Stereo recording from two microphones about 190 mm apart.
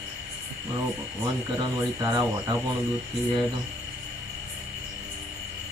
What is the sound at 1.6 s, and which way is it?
Speech, 20° right (ahead or behind).